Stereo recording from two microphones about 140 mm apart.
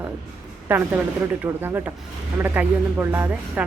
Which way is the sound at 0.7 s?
15° right (ahead or behind).